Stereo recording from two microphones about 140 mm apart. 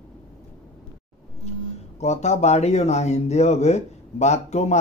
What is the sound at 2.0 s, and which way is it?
Speech, 55° left (ahead or behind).